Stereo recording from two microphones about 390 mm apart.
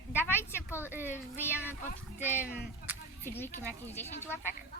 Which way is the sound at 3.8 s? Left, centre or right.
Centre.